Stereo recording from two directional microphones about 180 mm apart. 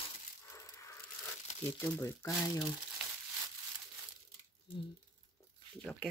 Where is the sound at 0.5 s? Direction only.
15° left (ahead or behind).